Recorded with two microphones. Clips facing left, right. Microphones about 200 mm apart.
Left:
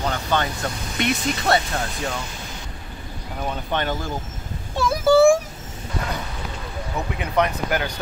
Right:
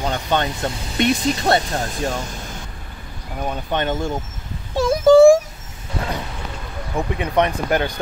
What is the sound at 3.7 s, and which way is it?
Speech, 25° right (ahead or behind).